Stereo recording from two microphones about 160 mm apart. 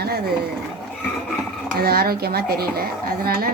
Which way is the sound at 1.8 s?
70° right (ahead or behind).